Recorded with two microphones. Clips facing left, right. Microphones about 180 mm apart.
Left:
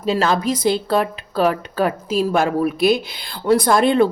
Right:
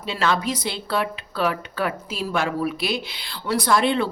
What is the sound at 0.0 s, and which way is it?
Speech, 40° left (ahead or behind).